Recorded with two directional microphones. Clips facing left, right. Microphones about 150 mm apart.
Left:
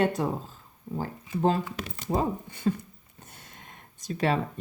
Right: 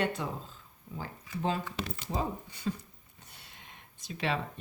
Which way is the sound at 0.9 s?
45° left (ahead or behind).